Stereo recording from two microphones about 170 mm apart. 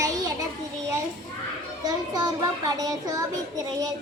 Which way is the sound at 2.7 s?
20° right (ahead or behind).